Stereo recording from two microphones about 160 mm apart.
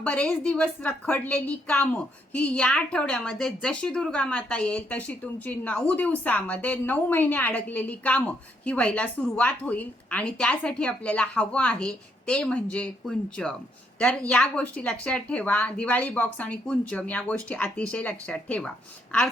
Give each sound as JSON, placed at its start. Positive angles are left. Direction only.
{"t": 0.0, "sound": "a woman's voice", "side_deg": 10}